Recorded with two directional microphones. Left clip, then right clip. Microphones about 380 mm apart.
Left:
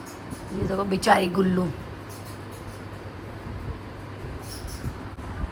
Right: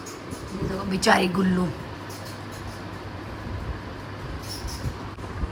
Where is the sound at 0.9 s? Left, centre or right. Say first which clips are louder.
Even; centre.